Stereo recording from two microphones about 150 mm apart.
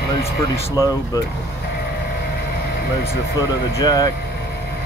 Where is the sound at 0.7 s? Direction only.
25° left (ahead or behind).